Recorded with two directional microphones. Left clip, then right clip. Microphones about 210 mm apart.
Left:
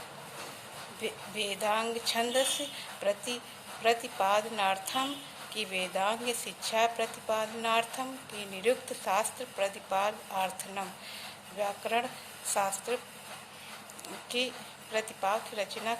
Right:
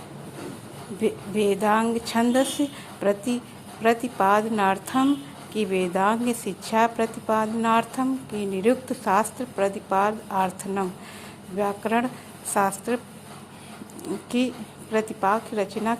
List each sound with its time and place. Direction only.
1.0 s a woman's voice: 25° right (ahead or behind)
14.0 s a woman's voice: 25° right (ahead or behind)